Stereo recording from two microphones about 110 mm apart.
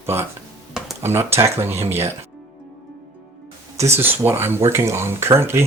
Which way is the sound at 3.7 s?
25° right (ahead or behind).